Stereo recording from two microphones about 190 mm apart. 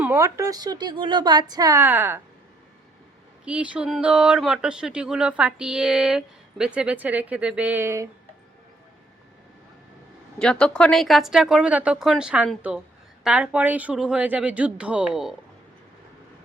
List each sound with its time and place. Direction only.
0.0 s speech: 15° right (ahead or behind)
3.4 s speech: 5° right (ahead or behind)
10.3 s speech: 5° left (ahead or behind)